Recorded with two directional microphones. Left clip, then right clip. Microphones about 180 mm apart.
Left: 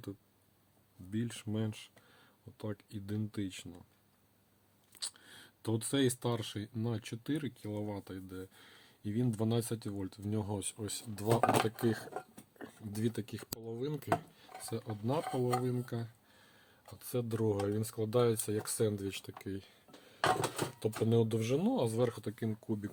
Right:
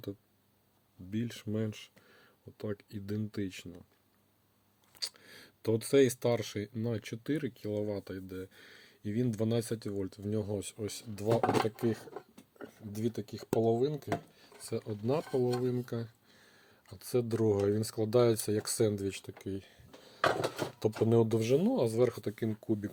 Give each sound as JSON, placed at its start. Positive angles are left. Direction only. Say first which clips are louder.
{"t": 1.1, "sound": "speech", "louder": "right 2 dB", "side_deg": -10}
{"t": 4.9, "sound": "speech", "louder": "right 4 dB", "side_deg": -10}
{"t": 14.6, "sound": "speech", "louder": "right 4 dB", "side_deg": -10}
{"t": 20.7, "sound": "speech", "louder": "right 5 dB", "side_deg": -15}